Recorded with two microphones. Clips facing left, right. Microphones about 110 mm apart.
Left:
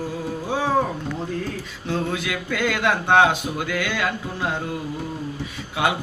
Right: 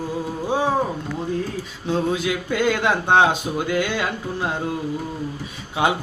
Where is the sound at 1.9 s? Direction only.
20° right (ahead or behind).